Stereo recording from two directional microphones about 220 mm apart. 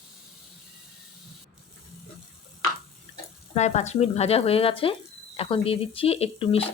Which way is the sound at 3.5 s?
30° left (ahead or behind).